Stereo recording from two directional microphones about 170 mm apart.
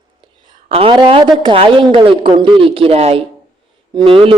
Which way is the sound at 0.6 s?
30° right (ahead or behind).